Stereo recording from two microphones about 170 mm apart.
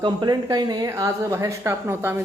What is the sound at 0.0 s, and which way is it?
Speech, 25° right (ahead or behind).